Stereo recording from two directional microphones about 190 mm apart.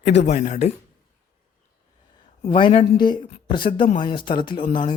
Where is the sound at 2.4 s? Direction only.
30° left (ahead or behind).